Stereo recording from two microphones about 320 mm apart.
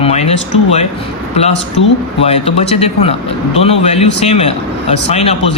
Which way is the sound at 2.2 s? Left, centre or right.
Centre.